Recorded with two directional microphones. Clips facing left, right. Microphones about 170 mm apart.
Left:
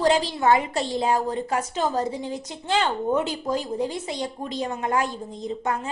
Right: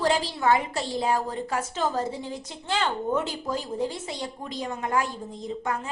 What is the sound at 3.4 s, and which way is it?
A woman's voice, 15° left (ahead or behind).